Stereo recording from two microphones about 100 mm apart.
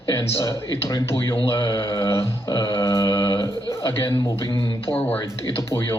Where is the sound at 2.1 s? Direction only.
25° left (ahead or behind).